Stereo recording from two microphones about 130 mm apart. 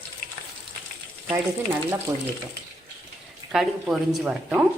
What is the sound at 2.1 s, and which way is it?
Speech, 30° right (ahead or behind).